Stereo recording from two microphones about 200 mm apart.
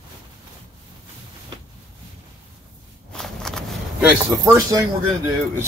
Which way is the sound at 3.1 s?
5° left (ahead or behind).